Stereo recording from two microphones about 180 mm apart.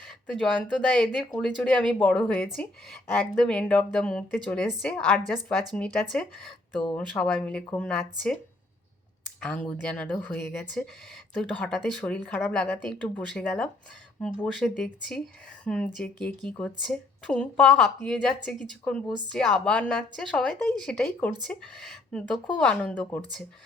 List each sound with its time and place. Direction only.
0.0 s a woman's voice: 5° left (ahead or behind)
9.4 s a woman's voice: 5° left (ahead or behind)